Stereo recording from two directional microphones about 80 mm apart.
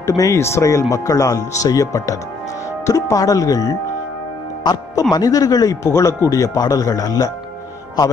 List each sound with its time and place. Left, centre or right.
0.0 s speech: left
5.1 s speech: left